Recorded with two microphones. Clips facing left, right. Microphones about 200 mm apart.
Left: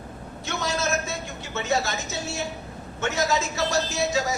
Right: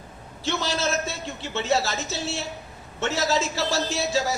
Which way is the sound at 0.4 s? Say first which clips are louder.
Right 1 dB; 30° right (ahead or behind).